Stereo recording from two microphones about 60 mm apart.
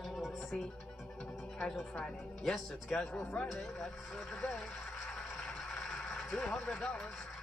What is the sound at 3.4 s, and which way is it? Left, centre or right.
Speech, centre.